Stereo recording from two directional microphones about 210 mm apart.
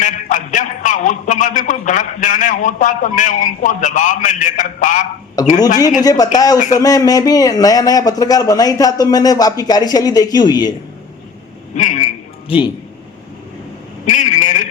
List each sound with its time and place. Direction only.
0.0 s a man's voice: 35° left (ahead or behind)
5.4 s speech: 20° left (ahead or behind)
11.8 s a man's voice: 35° left (ahead or behind)
14.1 s a man's voice: 35° left (ahead or behind)